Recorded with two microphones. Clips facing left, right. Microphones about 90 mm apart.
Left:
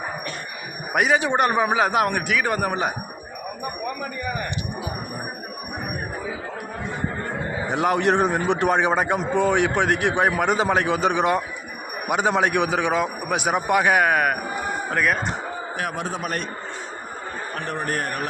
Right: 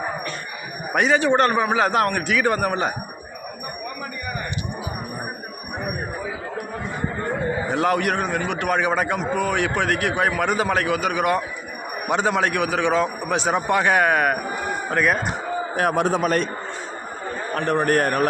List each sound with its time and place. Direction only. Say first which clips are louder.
0.9 s a man's voice: right 2 dB; 10° left (ahead or behind)
7.7 s a man's voice: left 2 dB; 20° left (ahead or behind)
12.0 s a man's voice: even; 10° left (ahead or behind)
15.7 s a man's voice: right 8 dB; 45° right (ahead or behind)
16.0 s a man's voice: right 8 dB; 85° right
17.7 s a man's voice: right 8 dB; 65° right (ahead or behind)